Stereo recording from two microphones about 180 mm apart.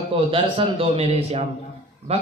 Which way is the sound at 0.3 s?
30° right (ahead or behind).